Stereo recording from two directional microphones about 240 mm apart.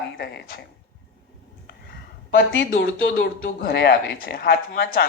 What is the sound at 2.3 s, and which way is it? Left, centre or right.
A woman's voice, left.